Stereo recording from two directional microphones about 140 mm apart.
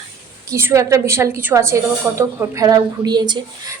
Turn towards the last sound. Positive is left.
turn(degrees=-30)  # may be behind; listen again after turning